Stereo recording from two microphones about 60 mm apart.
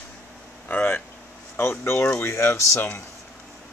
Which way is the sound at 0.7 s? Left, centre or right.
Left.